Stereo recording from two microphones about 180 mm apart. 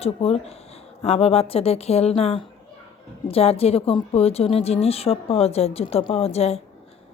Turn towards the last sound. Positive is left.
turn(degrees=35)  # may be behind; listen again after turning